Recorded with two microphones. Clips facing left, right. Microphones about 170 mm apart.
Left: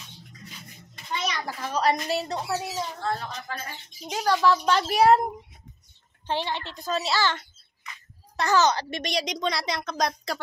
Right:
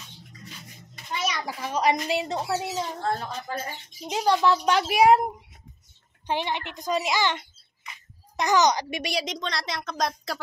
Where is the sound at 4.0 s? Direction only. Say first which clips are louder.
Right 1 dB; 15° right (ahead or behind).